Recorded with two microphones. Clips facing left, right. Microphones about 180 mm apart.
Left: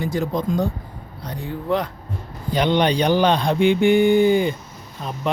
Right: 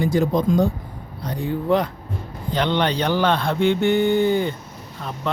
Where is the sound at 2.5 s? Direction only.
15° left (ahead or behind).